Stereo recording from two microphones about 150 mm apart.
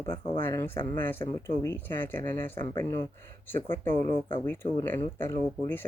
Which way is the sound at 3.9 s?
35° left (ahead or behind).